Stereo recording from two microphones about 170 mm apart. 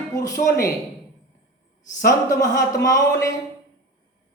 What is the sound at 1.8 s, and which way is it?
A man's voice, 20° left (ahead or behind).